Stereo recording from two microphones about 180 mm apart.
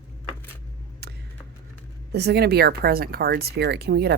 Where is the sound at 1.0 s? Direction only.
65° right (ahead or behind).